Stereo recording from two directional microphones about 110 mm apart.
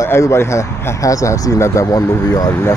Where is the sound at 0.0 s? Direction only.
25° left (ahead or behind).